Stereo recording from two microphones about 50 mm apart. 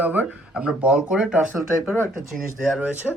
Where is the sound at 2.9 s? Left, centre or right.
Right.